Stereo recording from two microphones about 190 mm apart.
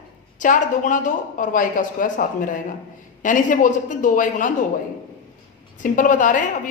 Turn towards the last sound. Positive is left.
turn(degrees=45)  # may be behind; listen again after turning